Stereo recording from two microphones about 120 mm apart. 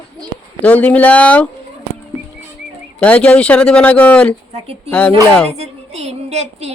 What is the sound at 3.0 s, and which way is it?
Speech, 10° left (ahead or behind).